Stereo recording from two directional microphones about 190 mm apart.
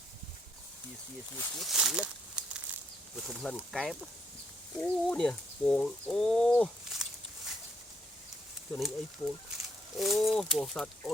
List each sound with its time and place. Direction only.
1.5 s speech: centre (ahead or behind)
8.7 s speech: 5° left (ahead or behind)